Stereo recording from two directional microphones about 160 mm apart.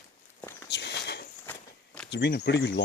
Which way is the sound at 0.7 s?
90° left.